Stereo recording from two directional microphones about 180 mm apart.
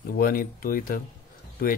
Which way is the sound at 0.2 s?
55° left (ahead or behind).